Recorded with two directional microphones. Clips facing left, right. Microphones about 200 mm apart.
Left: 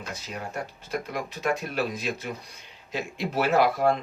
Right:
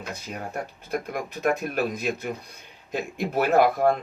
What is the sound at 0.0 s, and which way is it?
Speech, 55° right (ahead or behind).